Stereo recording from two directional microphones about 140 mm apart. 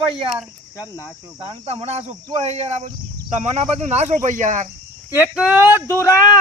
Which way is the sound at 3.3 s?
50° right (ahead or behind).